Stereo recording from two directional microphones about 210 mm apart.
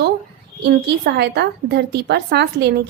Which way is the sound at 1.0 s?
50° right (ahead or behind).